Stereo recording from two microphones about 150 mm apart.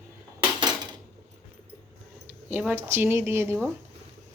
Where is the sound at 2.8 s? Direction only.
15° right (ahead or behind).